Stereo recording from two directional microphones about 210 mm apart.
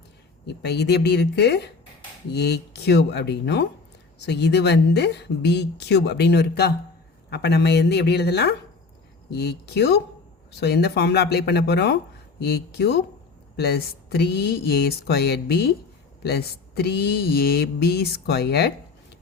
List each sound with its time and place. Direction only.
0.4 s speech: 55° left (ahead or behind)